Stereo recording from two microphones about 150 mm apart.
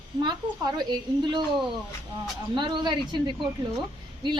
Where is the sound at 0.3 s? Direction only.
30° right (ahead or behind).